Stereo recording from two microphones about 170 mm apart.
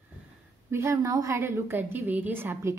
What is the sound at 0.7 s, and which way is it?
A woman's voice, 15° right (ahead or behind).